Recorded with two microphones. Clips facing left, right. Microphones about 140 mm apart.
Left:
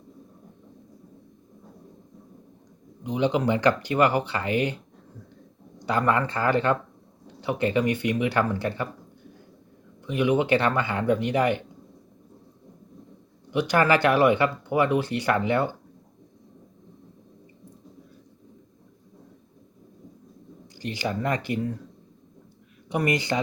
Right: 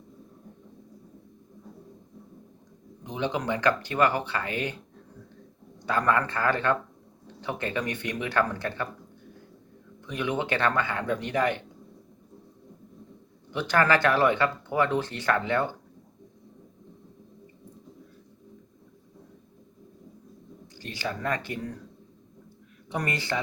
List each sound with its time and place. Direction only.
3.0 s speech: 15° left (ahead or behind)
5.8 s speech: 15° left (ahead or behind)
10.1 s speech: 10° left (ahead or behind)
13.5 s speech: 15° left (ahead or behind)
20.7 s speech: 15° left (ahead or behind)
22.9 s speech: 15° left (ahead or behind)